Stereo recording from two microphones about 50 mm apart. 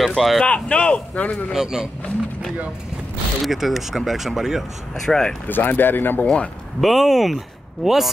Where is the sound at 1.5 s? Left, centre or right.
Centre.